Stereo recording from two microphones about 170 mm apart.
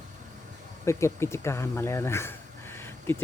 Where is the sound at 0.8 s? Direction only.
15° left (ahead or behind).